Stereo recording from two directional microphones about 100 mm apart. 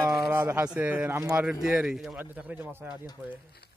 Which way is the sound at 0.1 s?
25° right (ahead or behind).